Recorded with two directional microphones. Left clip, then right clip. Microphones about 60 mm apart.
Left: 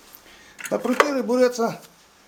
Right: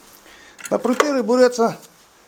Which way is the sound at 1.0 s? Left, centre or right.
Right.